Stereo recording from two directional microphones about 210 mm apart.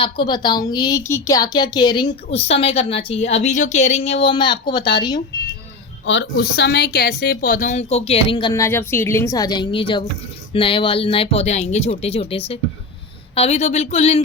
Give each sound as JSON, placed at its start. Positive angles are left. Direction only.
{"t": 0.0, "sound": "a woman's voice", "side_deg": 20}
{"t": 6.1, "sound": "a woman's voice", "side_deg": 55}